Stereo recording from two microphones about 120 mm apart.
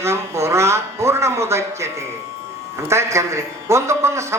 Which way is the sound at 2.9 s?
25° right (ahead or behind).